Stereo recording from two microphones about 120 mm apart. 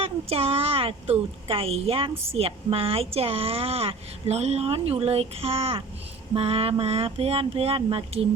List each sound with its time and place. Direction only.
0.0 s a child's voice: 55° right (ahead or behind)